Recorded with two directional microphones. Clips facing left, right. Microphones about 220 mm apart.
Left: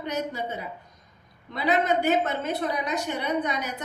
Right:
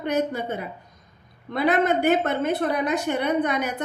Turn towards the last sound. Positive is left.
turn(degrees=-55)  # may be behind; listen again after turning